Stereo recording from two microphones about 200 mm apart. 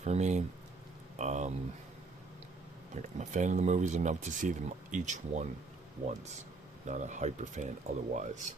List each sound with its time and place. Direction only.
0.0 s speech: 35° right (ahead or behind)
1.1 s a sound: 35° right (ahead or behind)
2.9 s speech: 35° right (ahead or behind)
6.8 s speech: 40° right (ahead or behind)